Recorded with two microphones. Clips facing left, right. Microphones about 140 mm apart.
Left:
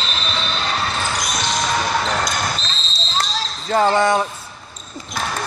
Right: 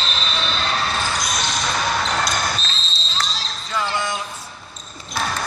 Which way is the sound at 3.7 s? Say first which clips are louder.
Left 9 dB; 50° left (ahead or behind).